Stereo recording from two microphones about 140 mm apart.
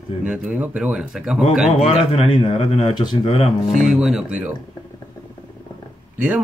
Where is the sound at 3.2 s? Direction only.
45° left (ahead or behind).